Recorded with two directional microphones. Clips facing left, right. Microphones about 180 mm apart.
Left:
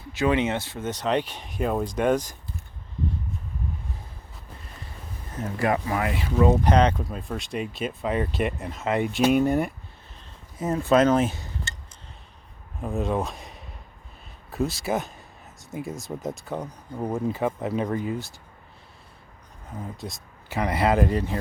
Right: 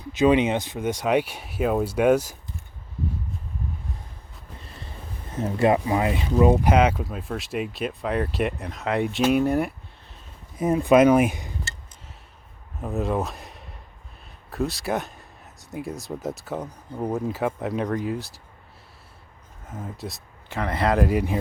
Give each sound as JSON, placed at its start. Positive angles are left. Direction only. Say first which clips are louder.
{"t": 0.0, "sound": "speech", "louder": "right 4 dB", "side_deg": -20}
{"t": 5.4, "sound": "speech", "louder": "right 5 dB", "side_deg": -25}
{"t": 6.3, "sound": "speech", "louder": "right 1 dB", "side_deg": -10}
{"t": 10.6, "sound": "speech", "louder": "right 3 dB", "side_deg": -15}
{"t": 12.8, "sound": "speech", "louder": "right 1 dB", "side_deg": 0}
{"t": 19.7, "sound": "speech", "louder": "right 1 dB", "side_deg": 0}
{"t": 20.6, "sound": "speech", "louder": "even", "side_deg": 10}